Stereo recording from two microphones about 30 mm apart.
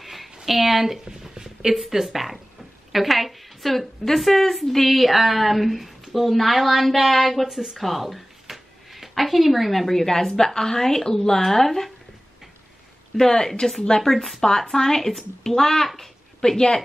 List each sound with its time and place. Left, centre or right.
0.0 s a sound: centre
0.5 s speech: centre
1.3 s a sound: right
1.7 s a woman's voice: centre
7.4 s speech: centre
7.7 s a sound: centre
9.2 s a woman's voice: centre
13.2 s a woman's voice: centre
14.1 s a woman's voice: centre
14.7 s a woman's voice: centre